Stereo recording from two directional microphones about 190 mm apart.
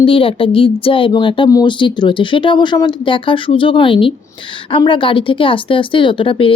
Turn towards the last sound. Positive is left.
turn(degrees=25)  # may be behind; listen again after turning